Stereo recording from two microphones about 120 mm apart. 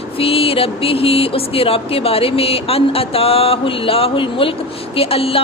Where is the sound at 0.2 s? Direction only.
50° left (ahead or behind).